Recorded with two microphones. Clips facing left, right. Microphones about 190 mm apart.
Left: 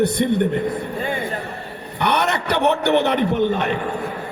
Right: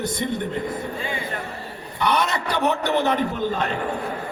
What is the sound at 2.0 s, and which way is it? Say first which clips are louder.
A man's voice: left 2 dB; 65° left (ahead or behind).